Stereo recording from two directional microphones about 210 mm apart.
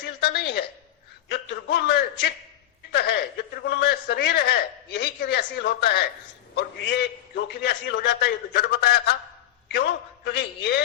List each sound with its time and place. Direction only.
0.2 s a man's voice: 50° left (ahead or behind)